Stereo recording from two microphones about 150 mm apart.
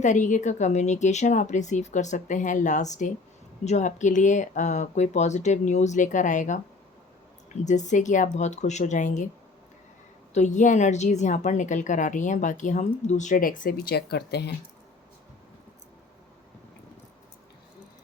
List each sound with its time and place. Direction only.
0.0 s speech: 55° left (ahead or behind)
10.3 s a woman's voice: 50° left (ahead or behind); by 14.5 s 90° left